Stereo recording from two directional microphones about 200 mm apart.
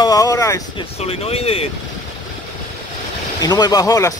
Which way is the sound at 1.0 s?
30° left (ahead or behind).